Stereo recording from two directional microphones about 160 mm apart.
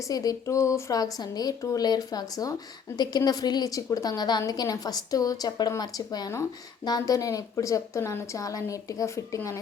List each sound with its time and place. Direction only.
0.0 s a woman's voice: 20° left (ahead or behind)